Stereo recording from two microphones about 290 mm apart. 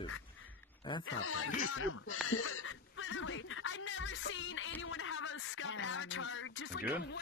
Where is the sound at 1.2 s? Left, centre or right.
Left.